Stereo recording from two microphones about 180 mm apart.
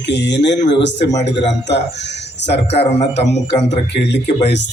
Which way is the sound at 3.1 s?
70° left (ahead or behind).